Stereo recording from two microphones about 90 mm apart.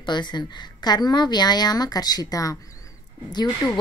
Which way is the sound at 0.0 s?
55° left (ahead or behind).